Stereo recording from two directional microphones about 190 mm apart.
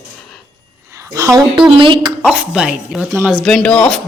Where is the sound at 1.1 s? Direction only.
20° right (ahead or behind).